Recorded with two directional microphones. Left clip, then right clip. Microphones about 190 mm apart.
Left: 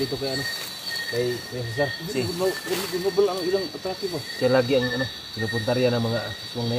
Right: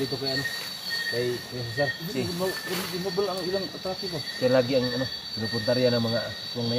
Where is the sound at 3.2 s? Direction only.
65° left (ahead or behind).